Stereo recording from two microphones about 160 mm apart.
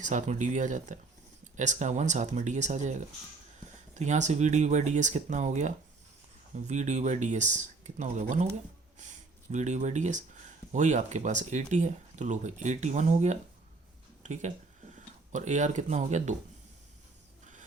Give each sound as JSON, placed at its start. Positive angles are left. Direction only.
{"t": 0.0, "sound": "speech", "side_deg": -50}